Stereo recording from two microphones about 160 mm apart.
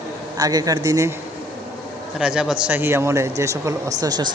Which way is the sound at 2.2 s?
5° right (ahead or behind).